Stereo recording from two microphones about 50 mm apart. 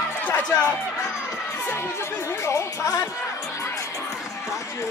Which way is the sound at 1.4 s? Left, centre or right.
Left.